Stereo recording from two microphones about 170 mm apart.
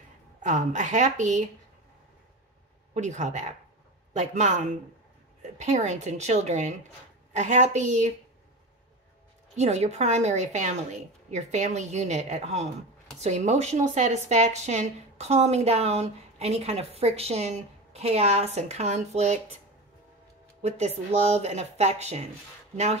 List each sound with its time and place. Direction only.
0.4 s a woman's voice: 45° right (ahead or behind)
2.9 s a woman's voice: 45° right (ahead or behind)
9.6 s speech: 40° right (ahead or behind)
20.6 s speech: 40° right (ahead or behind)